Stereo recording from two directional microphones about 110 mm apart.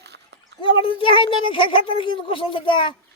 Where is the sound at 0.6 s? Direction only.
55° left (ahead or behind).